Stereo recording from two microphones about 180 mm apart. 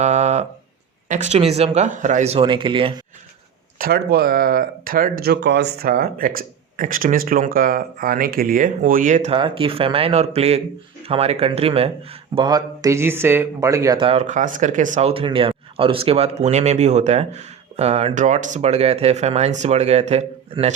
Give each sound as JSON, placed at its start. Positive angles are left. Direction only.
{"t": 0.0, "sound": "a sound", "side_deg": -40}
{"t": 1.0, "sound": "speech", "side_deg": -40}
{"t": 3.8, "sound": "speech", "side_deg": -55}
{"t": 9.3, "sound": "speech", "side_deg": -30}
{"t": 15.1, "sound": "speech", "side_deg": -30}